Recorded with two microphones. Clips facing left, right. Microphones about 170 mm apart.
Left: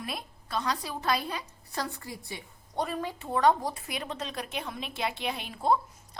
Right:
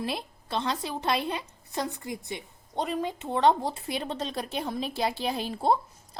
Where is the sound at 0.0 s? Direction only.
25° right (ahead or behind).